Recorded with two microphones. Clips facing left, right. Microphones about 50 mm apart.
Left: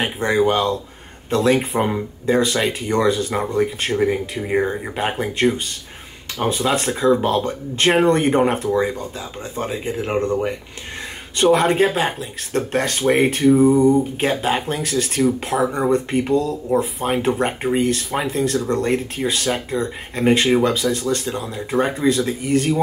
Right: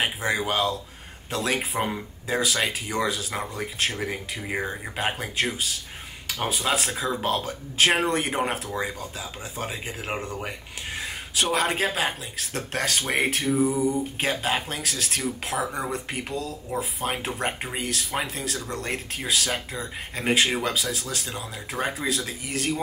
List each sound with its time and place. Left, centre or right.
0.0 s speech: centre
11.3 s speech: centre
13.7 s a sound: left
14.4 s speech: centre